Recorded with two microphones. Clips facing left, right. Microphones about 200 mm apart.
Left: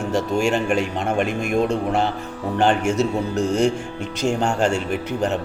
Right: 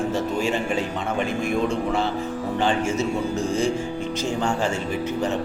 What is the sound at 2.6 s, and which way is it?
Speech, 70° left (ahead or behind).